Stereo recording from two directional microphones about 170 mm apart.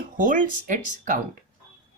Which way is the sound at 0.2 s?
50° right (ahead or behind).